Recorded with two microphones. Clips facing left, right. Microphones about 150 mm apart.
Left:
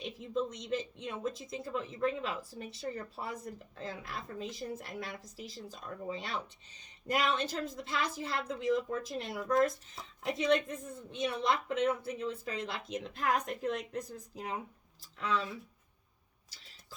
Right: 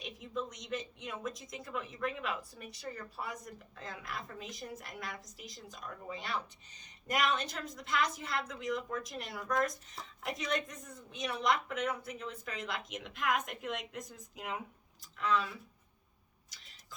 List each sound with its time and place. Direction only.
0.0 s a woman's voice: 30° left (ahead or behind)